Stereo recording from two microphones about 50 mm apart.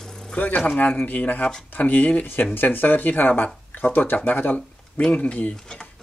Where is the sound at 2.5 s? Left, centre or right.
Left.